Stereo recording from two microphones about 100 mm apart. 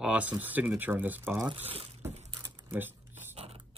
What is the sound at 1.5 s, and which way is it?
Speech, 75° right (ahead or behind).